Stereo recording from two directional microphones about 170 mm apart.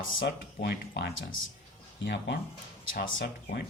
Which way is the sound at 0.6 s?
75° left (ahead or behind).